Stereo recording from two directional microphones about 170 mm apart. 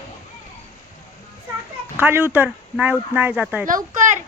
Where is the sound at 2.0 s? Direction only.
10° right (ahead or behind).